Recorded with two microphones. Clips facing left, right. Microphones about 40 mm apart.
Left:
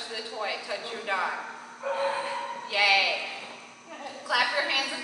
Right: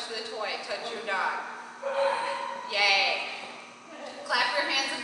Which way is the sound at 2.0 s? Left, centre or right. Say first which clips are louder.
Right 3 dB; centre.